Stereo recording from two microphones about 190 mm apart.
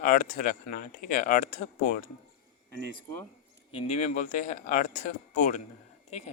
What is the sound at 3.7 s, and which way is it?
Speech, 30° left (ahead or behind).